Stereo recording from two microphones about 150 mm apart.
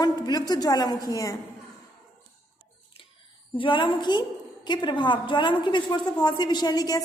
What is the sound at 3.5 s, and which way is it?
A woman's voice, 35° left (ahead or behind).